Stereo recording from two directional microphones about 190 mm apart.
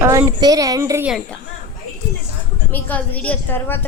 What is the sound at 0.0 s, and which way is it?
Speech, 15° right (ahead or behind).